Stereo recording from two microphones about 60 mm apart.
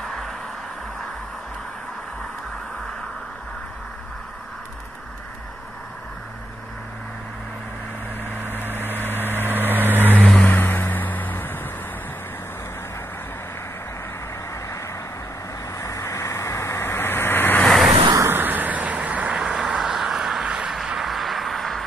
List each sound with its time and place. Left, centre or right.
0.0 s music: centre
8.3 s vehicle: left
9.5 s vehicle: right
10.2 s vehicle: left
10.5 s music: left
15.8 s vehicle: left
17.6 s vehicle: centre
18.3 s vehicle: right
19.3 s a sound: centre